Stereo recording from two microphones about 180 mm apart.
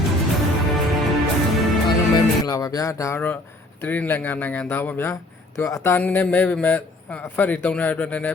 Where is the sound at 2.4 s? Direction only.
20° left (ahead or behind).